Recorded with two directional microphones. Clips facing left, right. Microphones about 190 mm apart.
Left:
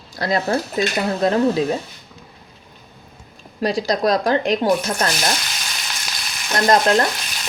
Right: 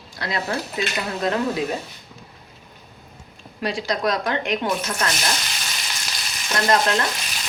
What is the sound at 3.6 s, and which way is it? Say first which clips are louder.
Speech: left 5 dB; 40° left (ahead or behind).